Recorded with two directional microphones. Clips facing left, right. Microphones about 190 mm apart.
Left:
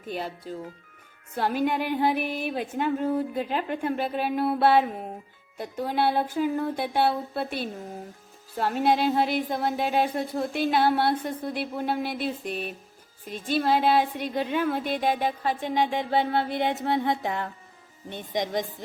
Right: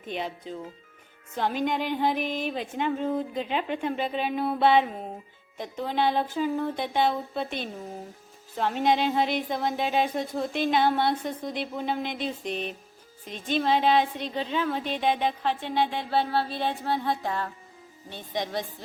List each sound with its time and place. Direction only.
0.1 s a woman's voice: 5° left (ahead or behind)
16.8 s music: 20° left (ahead or behind)
18.1 s speech: 15° left (ahead or behind)